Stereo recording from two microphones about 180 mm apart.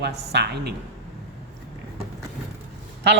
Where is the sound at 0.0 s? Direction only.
70° right (ahead or behind).